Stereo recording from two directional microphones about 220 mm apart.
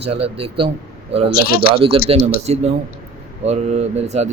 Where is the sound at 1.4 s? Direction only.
45° left (ahead or behind).